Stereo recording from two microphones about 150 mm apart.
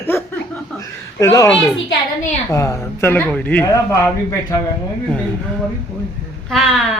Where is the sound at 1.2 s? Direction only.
20° left (ahead or behind).